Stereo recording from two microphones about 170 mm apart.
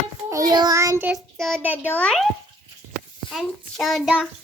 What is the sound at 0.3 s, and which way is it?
Child singing, 20° right (ahead or behind).